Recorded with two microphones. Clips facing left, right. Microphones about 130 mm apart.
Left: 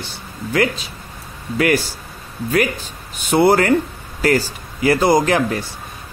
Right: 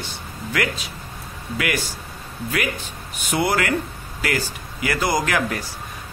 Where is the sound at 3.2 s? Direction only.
30° left (ahead or behind).